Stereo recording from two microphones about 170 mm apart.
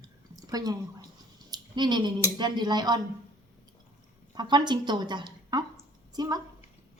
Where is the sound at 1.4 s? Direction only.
25° right (ahead or behind).